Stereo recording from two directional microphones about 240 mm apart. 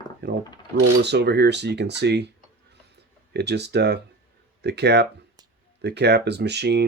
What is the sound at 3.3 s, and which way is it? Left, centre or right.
Speech, right.